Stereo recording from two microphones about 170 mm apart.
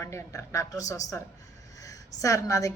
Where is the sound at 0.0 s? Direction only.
20° left (ahead or behind).